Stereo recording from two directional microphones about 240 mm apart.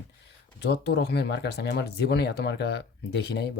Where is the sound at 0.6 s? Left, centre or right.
Left.